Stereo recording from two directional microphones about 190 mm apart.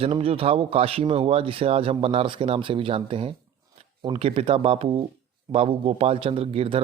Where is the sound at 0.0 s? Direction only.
30° right (ahead or behind).